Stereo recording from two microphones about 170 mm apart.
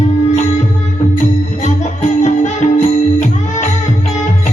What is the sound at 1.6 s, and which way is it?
Music, 40° left (ahead or behind).